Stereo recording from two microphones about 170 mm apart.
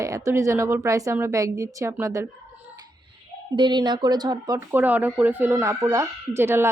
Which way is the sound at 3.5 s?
25° right (ahead or behind).